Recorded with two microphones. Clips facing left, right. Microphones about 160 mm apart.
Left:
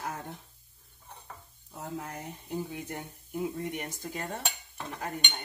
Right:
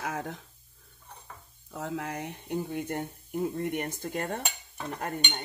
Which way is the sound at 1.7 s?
90° right.